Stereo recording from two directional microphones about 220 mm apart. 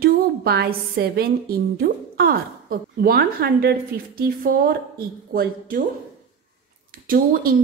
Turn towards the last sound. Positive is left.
turn(degrees=-40)  # may be behind; listen again after turning